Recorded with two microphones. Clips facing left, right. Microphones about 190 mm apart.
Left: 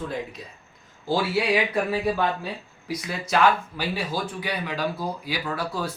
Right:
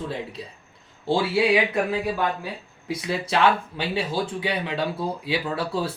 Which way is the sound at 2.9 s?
30° right (ahead or behind).